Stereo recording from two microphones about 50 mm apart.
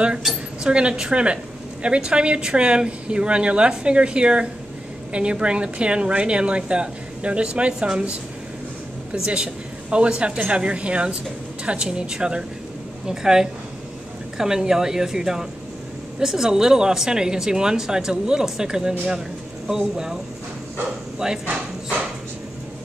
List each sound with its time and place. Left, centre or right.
0.7 s a woman's voice: centre
9.1 s a woman's voice: centre
21.2 s speech: centre